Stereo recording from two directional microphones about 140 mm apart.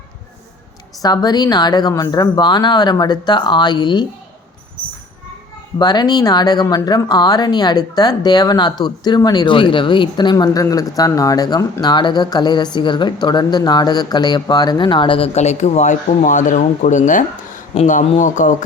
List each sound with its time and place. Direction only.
1.0 s a woman's voice: 30° left (ahead or behind)
5.8 s a woman's voice: 30° left (ahead or behind); by 18.5 s 65° left (ahead or behind)